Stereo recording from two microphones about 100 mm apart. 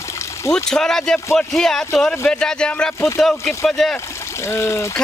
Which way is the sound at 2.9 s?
25° left (ahead or behind).